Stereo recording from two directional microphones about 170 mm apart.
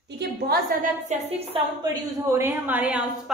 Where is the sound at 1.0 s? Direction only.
35° right (ahead or behind).